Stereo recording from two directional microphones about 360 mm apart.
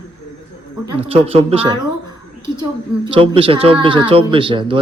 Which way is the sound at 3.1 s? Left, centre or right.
Centre.